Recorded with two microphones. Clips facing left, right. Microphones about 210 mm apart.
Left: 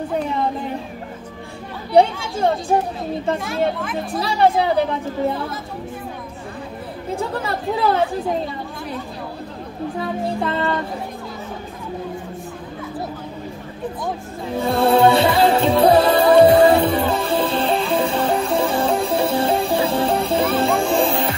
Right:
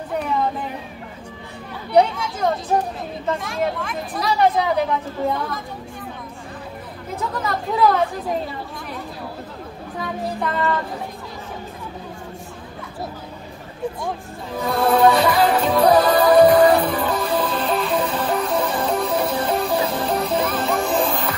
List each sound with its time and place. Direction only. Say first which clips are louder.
2.0 s speech: left 2 dB; 30° left (ahead or behind)
4.2 s speech: left 1 dB; 30° left (ahead or behind)
7.2 s speech: even; 30° left (ahead or behind)
9.9 s child singing: left 2 dB; 30° left (ahead or behind)
14.6 s music: left 2 dB; 30° left (ahead or behind)